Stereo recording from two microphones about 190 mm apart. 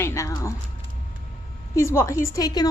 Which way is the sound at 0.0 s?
15° left (ahead or behind).